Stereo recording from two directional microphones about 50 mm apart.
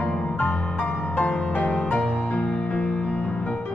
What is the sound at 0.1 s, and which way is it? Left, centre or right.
Music, centre.